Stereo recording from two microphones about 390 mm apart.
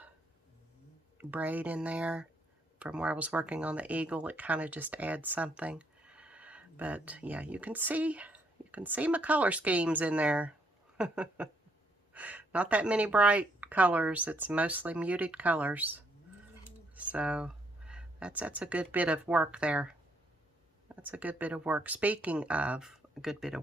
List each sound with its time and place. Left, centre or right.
1.2 s speech: centre